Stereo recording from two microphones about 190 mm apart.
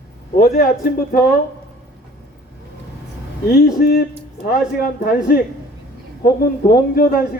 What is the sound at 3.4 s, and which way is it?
Speech, 55° left (ahead or behind).